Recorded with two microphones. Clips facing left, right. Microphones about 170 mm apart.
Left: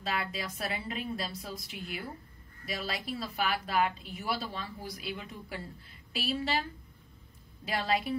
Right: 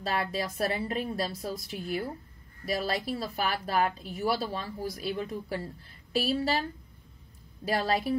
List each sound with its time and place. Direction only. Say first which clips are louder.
0.0 s a woman's voice: right 5 dB; 40° right (ahead or behind)
7.6 s a woman's voice: right 3 dB; 40° right (ahead or behind)